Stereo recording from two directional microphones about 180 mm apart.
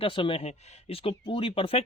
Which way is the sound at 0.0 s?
30° left (ahead or behind).